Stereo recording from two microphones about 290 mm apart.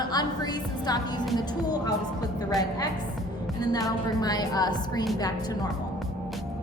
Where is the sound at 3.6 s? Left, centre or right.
Centre.